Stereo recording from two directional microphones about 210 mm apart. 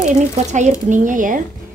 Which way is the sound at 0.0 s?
35° right (ahead or behind).